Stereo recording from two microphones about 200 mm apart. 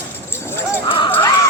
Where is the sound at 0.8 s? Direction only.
25° left (ahead or behind).